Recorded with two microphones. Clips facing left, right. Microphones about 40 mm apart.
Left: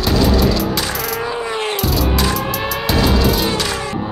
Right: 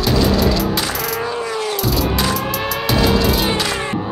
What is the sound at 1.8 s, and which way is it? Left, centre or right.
Music, centre.